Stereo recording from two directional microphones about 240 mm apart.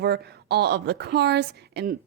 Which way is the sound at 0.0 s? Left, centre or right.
Right.